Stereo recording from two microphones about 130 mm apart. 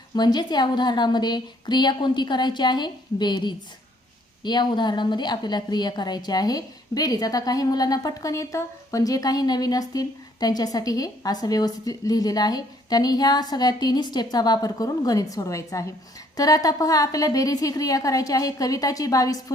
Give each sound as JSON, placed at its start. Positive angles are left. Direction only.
{"t": 0.1, "sound": "a woman's voice", "side_deg": 30}